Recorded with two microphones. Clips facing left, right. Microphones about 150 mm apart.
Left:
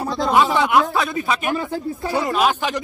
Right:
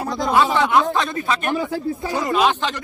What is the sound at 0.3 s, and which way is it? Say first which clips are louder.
Speech: even; 15° left (ahead or behind).